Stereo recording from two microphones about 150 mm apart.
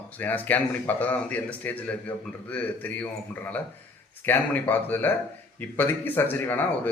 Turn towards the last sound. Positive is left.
turn(degrees=15)  # may be behind; listen again after turning